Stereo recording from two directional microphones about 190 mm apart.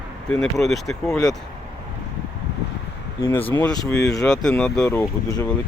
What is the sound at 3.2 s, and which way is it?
Speech, 15° left (ahead or behind).